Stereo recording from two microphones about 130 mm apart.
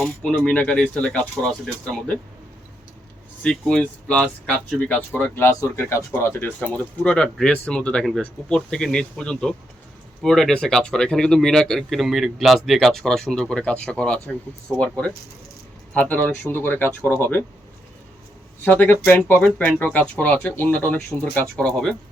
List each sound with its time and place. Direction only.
0.0 s speech: 10° left (ahead or behind)
3.4 s speech: 5° left (ahead or behind)
16.0 s speech: 10° left (ahead or behind)
18.6 s speech: 15° left (ahead or behind)